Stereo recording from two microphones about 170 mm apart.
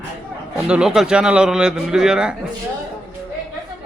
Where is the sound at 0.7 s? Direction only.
5° right (ahead or behind).